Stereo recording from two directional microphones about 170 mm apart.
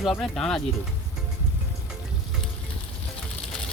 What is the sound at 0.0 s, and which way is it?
Speech, centre (ahead or behind).